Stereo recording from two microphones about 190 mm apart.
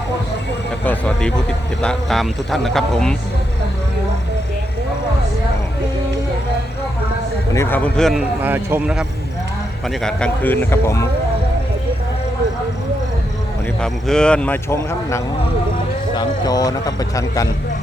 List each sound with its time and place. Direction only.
0.9 s speech: 5° left (ahead or behind)
7.5 s speech: 10° left (ahead or behind)
13.8 s speech: 5° left (ahead or behind)